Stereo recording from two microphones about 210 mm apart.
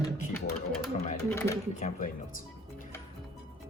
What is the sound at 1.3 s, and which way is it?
Speech, 10° left (ahead or behind).